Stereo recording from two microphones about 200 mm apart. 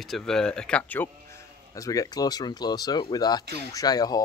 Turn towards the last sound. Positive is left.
turn(degrees=20)  # may be behind; listen again after turning